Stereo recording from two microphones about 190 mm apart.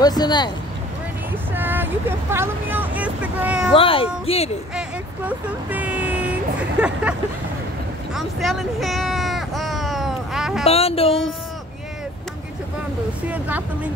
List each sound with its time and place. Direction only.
0.0 s speech: 20° left (ahead or behind)
1.5 s speech: 10° right (ahead or behind)
3.7 s speech: 30° left (ahead or behind)
4.7 s speech: 10° right (ahead or behind)
8.1 s a sound: centre (ahead or behind)
10.6 s speech: 30° left (ahead or behind)
13.3 s speech: 10° right (ahead or behind)